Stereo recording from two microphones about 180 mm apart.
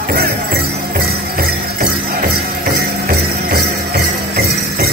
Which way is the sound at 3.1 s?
55° right (ahead or behind).